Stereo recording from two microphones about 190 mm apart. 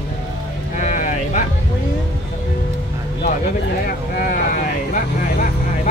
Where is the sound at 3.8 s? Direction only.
50° left (ahead or behind).